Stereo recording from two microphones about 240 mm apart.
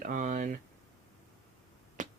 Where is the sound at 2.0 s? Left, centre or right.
Right.